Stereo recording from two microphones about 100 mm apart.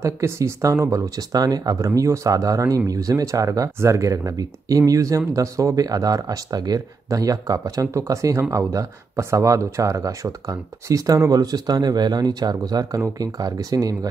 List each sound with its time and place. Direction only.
0.0 s speech: 30° right (ahead or behind)